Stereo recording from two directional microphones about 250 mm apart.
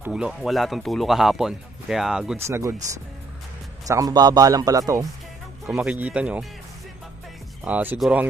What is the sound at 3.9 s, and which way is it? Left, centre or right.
Speech, centre.